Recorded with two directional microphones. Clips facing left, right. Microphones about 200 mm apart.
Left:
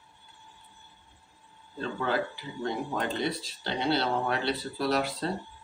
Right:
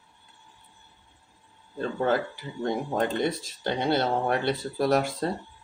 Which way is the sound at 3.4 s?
50° right (ahead or behind).